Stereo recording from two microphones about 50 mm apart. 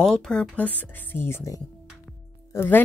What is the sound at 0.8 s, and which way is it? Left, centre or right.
Speech, left.